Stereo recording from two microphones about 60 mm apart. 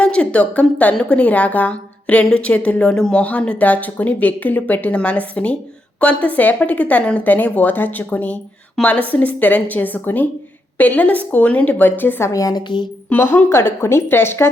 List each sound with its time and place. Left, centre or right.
0.0 s speech: centre; by 12.2 s left
12.2 s a woman's voice: left
13.1 s a woman's voice: left